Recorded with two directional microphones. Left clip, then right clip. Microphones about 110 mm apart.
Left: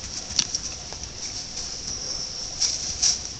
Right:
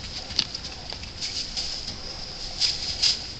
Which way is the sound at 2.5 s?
5° left (ahead or behind).